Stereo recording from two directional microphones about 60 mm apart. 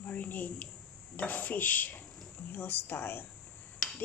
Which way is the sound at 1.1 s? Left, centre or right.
Left.